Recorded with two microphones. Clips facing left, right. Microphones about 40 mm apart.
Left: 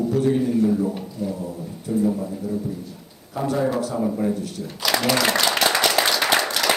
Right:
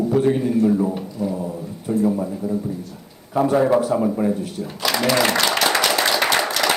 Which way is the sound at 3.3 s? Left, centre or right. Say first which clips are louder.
Right 6 dB; right.